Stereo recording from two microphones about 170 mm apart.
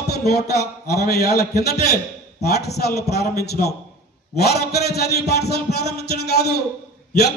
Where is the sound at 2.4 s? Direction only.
70° left (ahead or behind).